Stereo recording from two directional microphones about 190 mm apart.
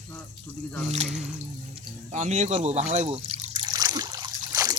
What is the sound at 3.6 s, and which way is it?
Trickle, 20° right (ahead or behind).